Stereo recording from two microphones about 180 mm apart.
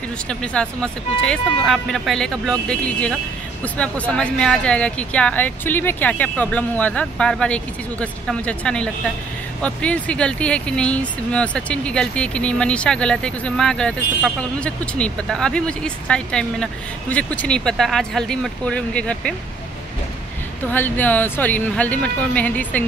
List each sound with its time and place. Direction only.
0.3 s speech: 5° left (ahead or behind)
20.7 s speech: 10° left (ahead or behind)